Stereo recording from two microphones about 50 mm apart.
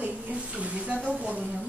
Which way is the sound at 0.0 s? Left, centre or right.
Right.